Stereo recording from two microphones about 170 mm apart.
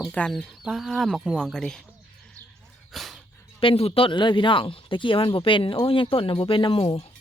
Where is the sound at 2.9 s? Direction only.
Centre (ahead or behind).